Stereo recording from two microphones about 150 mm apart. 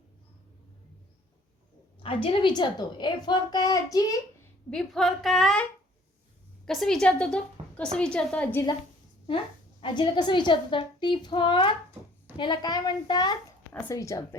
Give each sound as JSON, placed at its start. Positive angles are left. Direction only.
{"t": 2.0, "sound": "a woman's voice", "side_deg": 35}
{"t": 4.7, "sound": "speech", "side_deg": 5}
{"t": 6.7, "sound": "a woman's voice", "side_deg": 0}
{"t": 9.8, "sound": "a child's voice", "side_deg": 30}